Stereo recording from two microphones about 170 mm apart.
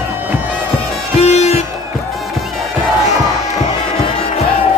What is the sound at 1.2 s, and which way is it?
Music, 40° left (ahead or behind).